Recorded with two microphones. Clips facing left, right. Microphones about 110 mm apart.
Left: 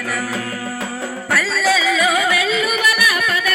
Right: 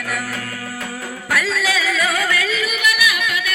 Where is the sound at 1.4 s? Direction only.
5° left (ahead or behind).